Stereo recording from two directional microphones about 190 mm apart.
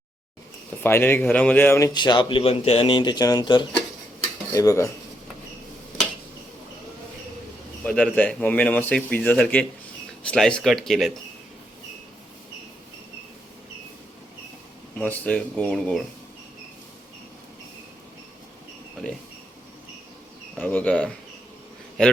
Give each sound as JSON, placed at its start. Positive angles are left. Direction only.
{"t": 0.8, "sound": "speech", "side_deg": 10}
{"t": 7.9, "sound": "speech", "side_deg": 5}
{"t": 14.9, "sound": "speech", "side_deg": 10}
{"t": 20.6, "sound": "speech", "side_deg": 10}